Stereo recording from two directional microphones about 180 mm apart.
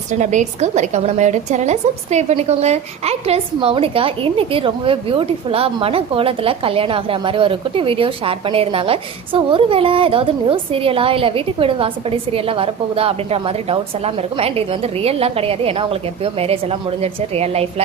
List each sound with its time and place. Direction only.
0.1 s a woman's voice: 40° right (ahead or behind)